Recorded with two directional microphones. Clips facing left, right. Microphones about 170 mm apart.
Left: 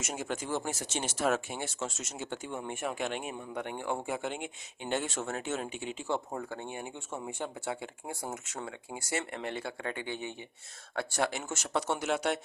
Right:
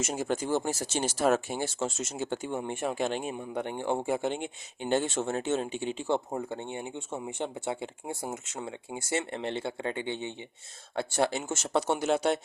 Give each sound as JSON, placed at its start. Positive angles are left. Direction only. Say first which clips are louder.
{"t": 0.0, "sound": "speech", "louder": "right 6 dB", "side_deg": -35}